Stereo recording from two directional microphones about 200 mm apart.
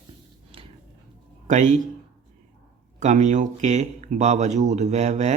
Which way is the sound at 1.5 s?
35° right (ahead or behind).